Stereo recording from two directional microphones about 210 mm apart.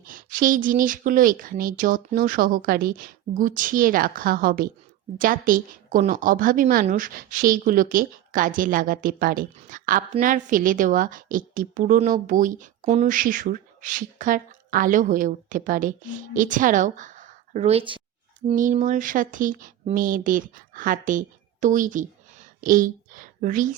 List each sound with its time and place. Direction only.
0.0 s a woman's voice: 40° right (ahead or behind)
18.4 s a woman's voice: 35° right (ahead or behind)